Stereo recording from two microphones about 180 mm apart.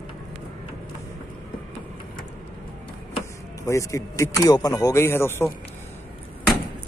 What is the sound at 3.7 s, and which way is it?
Speech, 15° left (ahead or behind).